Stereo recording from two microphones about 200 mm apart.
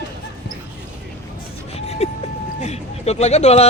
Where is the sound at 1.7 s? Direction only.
35° left (ahead or behind).